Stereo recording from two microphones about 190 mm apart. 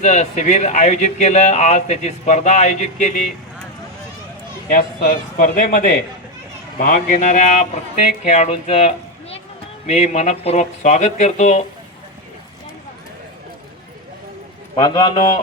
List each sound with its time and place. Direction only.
0.0 s speech: 40° left (ahead or behind)
4.7 s speech: 45° left (ahead or behind)
14.8 s a man's voice: 25° left (ahead or behind)